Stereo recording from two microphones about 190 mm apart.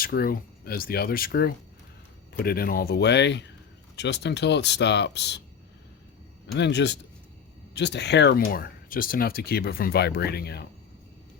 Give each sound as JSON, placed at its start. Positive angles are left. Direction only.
{"t": 0.0, "sound": "speech", "side_deg": 55}
{"t": 6.5, "sound": "speech", "side_deg": 65}